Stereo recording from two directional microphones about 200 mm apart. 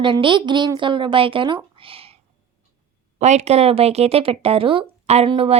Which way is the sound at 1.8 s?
30° right (ahead or behind).